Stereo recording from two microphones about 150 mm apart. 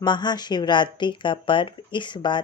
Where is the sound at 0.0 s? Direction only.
30° left (ahead or behind).